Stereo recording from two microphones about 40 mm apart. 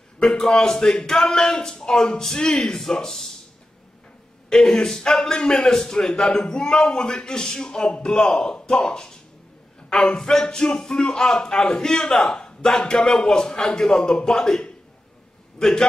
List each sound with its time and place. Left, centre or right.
0.2 s a man's voice: centre
4.5 s a man's voice: centre